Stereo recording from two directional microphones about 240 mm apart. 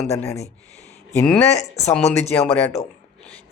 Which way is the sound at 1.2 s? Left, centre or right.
Centre.